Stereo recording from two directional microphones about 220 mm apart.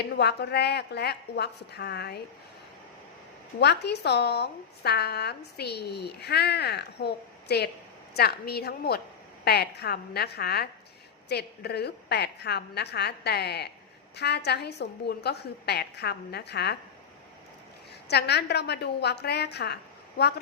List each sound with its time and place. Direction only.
0.0 s a woman's voice: 50° left (ahead or behind)
3.6 s a woman's voice: 50° left (ahead or behind)
18.1 s a woman's voice: 50° left (ahead or behind)